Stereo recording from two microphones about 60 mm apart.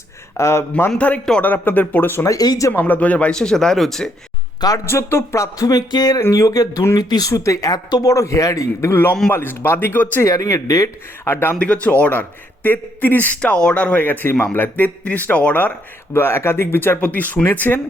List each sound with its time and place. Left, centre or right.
0.3 s speech: left
0.9 s speech: left
1.4 s speech: left
2.2 s speech: left
2.7 s speech: left
3.3 s speech: centre
4.9 s speech: left
6.8 s speech: left
8.9 s speech: left
10.2 s speech: left
11.3 s speech: left
11.6 s speech: left
16.1 s speech: left
17.0 s speech: left